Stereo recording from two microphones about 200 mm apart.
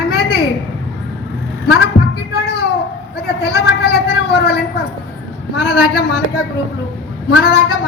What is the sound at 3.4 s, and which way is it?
Speech, 55° left (ahead or behind).